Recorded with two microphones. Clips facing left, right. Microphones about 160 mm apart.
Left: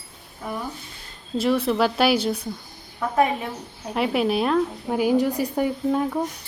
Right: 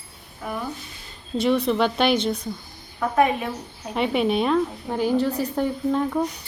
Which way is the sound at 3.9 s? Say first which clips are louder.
Even; centre (ahead or behind).